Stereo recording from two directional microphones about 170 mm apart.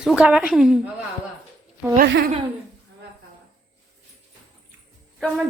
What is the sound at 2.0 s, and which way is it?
Speech, 75° right (ahead or behind).